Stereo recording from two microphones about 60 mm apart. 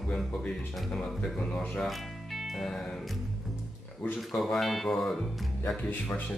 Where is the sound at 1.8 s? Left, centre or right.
Centre.